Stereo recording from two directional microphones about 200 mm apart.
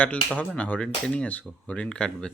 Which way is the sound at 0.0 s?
5° left (ahead or behind).